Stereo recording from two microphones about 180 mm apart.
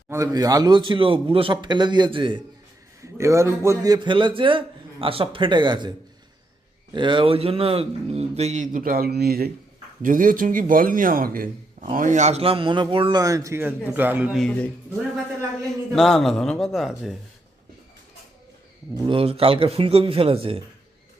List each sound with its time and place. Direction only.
0.1 s a man's voice: 15° right (ahead or behind)
3.0 s a man's voice: 15° right (ahead or behind)
6.9 s a man's voice: 25° right (ahead or behind); by 14.3 s 10° right (ahead or behind)
14.3 s a woman's voice: 5° left (ahead or behind)
18.9 s a man's voice: 30° right (ahead or behind)